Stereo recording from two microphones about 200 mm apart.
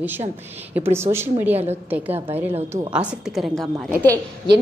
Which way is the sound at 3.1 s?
Centre (ahead or behind).